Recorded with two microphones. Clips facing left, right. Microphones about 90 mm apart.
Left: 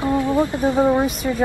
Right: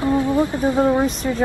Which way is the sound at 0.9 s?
5° left (ahead or behind).